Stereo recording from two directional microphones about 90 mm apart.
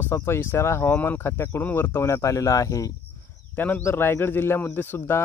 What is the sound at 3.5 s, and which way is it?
Speech, 20° left (ahead or behind).